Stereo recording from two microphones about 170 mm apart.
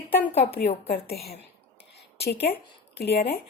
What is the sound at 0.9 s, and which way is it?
Speech, 65° left (ahead or behind).